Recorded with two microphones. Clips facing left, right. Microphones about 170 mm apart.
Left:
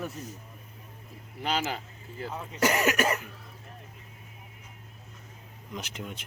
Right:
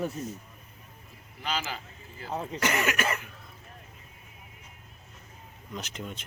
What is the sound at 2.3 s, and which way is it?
Speech, 30° right (ahead or behind).